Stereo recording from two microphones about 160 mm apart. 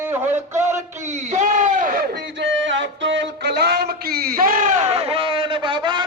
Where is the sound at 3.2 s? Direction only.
90° right.